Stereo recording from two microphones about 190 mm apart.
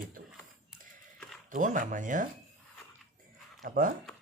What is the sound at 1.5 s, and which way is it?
Speech, 40° right (ahead or behind).